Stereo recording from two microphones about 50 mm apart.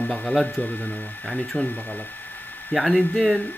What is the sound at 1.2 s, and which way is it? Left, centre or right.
Speech, centre.